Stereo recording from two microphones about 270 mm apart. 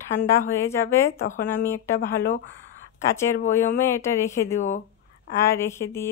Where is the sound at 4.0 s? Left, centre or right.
Centre.